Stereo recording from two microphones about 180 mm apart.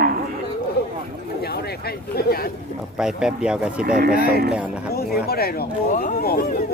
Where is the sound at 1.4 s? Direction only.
60° left (ahead or behind).